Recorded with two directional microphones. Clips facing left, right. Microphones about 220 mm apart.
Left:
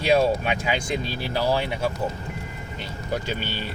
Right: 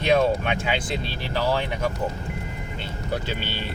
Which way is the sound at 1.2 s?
10° left (ahead or behind).